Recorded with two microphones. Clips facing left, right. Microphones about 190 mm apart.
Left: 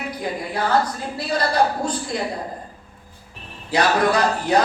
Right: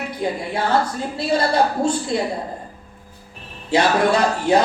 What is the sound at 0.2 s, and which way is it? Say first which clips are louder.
A man's voice: right 3 dB; 25° right (ahead or behind).